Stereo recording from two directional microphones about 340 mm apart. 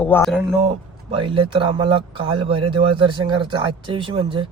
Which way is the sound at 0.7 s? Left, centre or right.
Centre.